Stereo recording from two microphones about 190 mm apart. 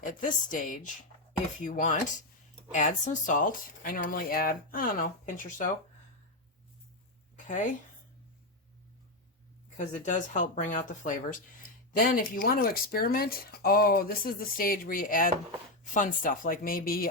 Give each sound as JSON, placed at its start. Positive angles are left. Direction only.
{"t": 0.0, "sound": "speech", "side_deg": 45}
{"t": 7.3, "sound": "a sound", "side_deg": 40}
{"t": 9.7, "sound": "speech", "side_deg": 40}